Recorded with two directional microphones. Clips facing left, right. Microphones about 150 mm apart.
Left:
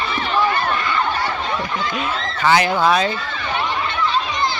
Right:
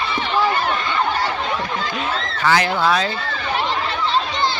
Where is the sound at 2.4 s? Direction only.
15° left (ahead or behind).